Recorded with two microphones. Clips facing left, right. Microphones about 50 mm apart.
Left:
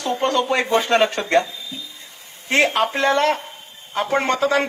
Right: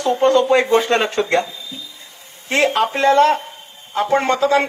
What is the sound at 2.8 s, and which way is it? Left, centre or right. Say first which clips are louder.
Speech: right 2 dB; right.